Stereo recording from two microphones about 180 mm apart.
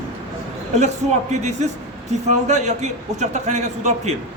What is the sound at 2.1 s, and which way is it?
A man's voice, 40° right (ahead or behind).